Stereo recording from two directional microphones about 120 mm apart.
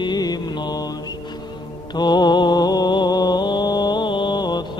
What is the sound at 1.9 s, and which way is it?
Mantra, 35° left (ahead or behind).